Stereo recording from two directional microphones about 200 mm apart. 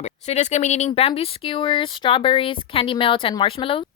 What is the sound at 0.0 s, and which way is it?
Speech, 35° left (ahead or behind).